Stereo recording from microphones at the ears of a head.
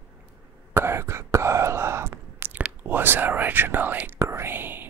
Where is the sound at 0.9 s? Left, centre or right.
Right.